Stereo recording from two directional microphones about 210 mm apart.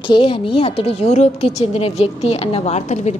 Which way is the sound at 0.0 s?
25° left (ahead or behind).